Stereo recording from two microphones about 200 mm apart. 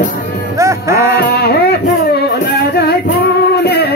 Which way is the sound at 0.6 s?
15° right (ahead or behind).